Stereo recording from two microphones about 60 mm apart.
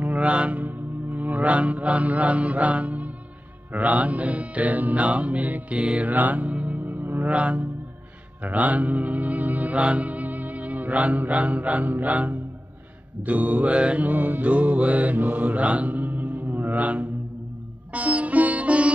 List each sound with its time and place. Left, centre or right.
0.0 s speech: right
3.7 s music: right
7.2 s music: right
13.2 s mantra: right
17.9 s music: right